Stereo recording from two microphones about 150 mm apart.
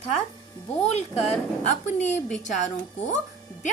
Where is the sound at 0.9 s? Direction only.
45° left (ahead or behind).